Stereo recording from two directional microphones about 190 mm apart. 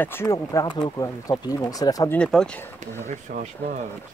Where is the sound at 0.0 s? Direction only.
10° left (ahead or behind).